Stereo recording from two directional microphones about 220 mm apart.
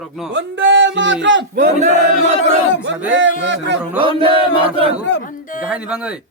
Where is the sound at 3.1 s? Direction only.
55° right (ahead or behind).